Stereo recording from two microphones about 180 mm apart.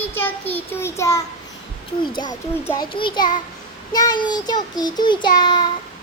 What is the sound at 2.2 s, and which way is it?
Child singing, 20° left (ahead or behind).